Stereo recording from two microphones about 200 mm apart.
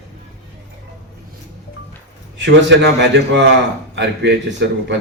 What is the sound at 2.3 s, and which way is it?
A man's voice, 60° right (ahead or behind).